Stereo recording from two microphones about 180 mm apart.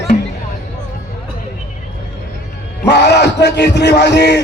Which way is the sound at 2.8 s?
70° left (ahead or behind).